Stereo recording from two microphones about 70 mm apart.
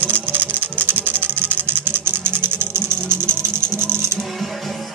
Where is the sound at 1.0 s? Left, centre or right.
Right.